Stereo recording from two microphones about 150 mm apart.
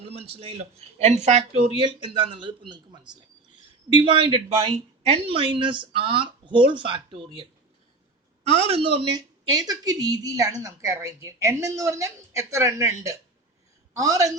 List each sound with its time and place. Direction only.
0.0 s speech: 40° right (ahead or behind)
8.4 s speech: 45° right (ahead or behind)
9.0 s a woman's voice: 25° right (ahead or behind)